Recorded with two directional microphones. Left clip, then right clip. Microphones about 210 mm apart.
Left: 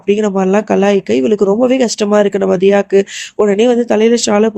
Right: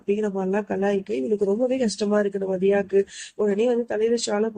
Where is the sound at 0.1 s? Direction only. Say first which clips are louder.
Left 12 dB; 40° left (ahead or behind).